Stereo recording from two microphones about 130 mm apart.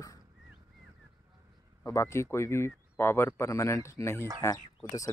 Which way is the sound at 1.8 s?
25° left (ahead or behind).